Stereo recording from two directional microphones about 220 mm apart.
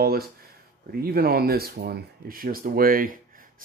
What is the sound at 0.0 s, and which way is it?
Speech, 45° right (ahead or behind).